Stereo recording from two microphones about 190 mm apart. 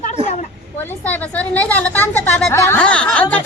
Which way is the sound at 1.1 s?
10° left (ahead or behind).